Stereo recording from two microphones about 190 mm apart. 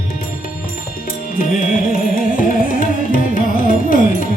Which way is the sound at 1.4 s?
45° left (ahead or behind).